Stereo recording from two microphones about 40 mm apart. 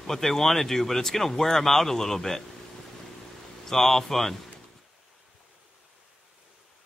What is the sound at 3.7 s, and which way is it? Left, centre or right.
Speech, centre.